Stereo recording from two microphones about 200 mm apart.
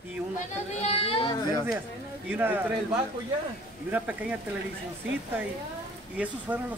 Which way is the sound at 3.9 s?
5° right (ahead or behind).